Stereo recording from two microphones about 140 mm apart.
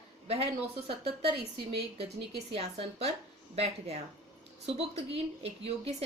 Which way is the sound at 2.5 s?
50° right (ahead or behind).